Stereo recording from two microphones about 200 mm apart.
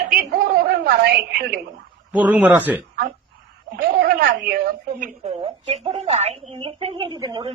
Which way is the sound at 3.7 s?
50° right (ahead or behind).